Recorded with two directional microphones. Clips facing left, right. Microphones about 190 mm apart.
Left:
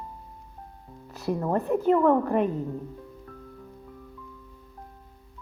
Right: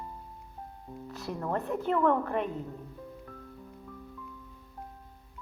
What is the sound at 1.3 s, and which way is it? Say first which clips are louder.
Speech: left 5 dB; 20° left (ahead or behind).